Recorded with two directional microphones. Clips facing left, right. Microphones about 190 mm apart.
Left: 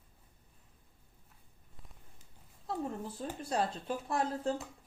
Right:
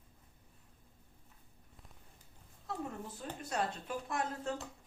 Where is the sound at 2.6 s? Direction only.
30° left (ahead or behind).